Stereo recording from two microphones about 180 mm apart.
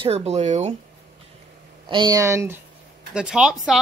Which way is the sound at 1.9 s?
25° right (ahead or behind).